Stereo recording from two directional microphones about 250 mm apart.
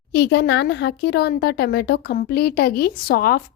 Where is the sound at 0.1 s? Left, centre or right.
Left.